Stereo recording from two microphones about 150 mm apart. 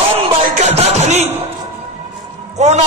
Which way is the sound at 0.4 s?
50° right (ahead or behind).